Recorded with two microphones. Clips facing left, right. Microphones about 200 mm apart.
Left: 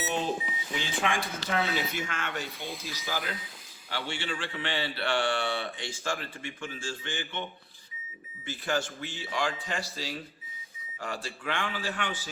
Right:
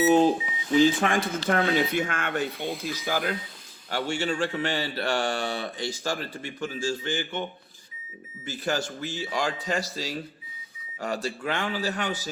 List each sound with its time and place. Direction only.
0.8 s speech: 40° right (ahead or behind)
2.6 s speech: centre (ahead or behind)
2.8 s speech: 55° right (ahead or behind)
8.4 s speech: 40° right (ahead or behind)